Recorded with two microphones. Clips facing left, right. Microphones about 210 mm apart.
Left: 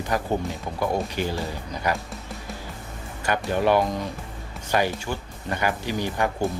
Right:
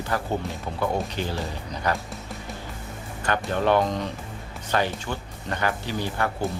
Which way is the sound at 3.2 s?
10° left (ahead or behind).